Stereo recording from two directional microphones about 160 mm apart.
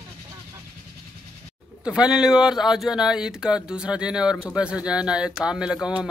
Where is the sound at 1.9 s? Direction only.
5° right (ahead or behind).